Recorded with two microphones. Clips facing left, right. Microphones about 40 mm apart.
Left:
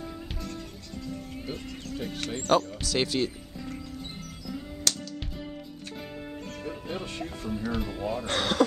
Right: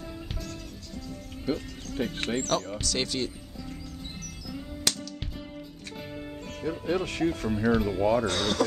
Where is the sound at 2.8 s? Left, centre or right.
Centre.